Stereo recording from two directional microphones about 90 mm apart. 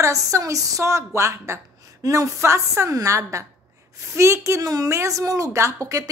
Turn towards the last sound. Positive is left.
turn(degrees=-40)  # may be behind; listen again after turning